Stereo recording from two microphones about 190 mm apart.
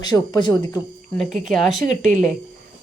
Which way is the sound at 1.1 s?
Centre (ahead or behind).